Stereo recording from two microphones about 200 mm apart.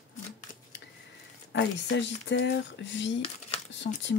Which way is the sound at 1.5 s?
65° left (ahead or behind).